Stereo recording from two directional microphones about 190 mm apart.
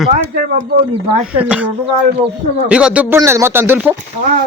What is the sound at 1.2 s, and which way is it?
Speech, 5° right (ahead or behind).